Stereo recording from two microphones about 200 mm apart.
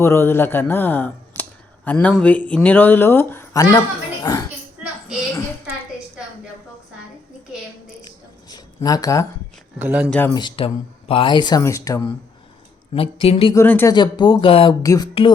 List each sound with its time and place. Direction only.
0.0 s speech: 10° left (ahead or behind)
8.0 s a sound: 20° left (ahead or behind)
9.7 s speech: 5° right (ahead or behind)
10.1 s speech: 10° left (ahead or behind)
10.3 s speech: 25° left (ahead or behind)
12.9 s speech: 30° left (ahead or behind)
13.5 s speech: 10° left (ahead or behind)
13.9 s speech: 25° left (ahead or behind)